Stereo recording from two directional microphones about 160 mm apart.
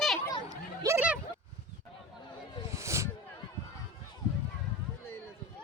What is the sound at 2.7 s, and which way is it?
Snake, 20° right (ahead or behind).